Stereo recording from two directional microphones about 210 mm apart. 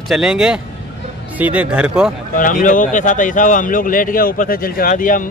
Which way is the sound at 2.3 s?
40° left (ahead or behind).